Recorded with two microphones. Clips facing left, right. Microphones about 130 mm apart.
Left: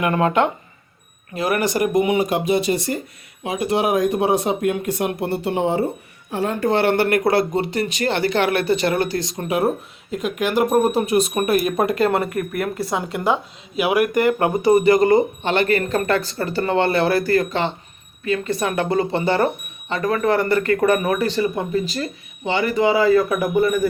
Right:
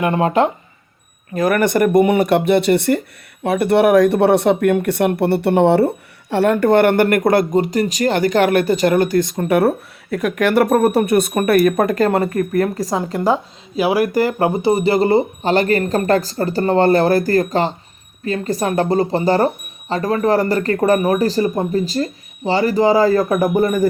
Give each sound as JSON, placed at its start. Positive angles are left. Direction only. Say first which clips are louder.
{"t": 0.0, "sound": "speech", "louder": "right 2 dB", "side_deg": -30}
{"t": 1.4, "sound": "speech", "louder": "right 5 dB", "side_deg": -45}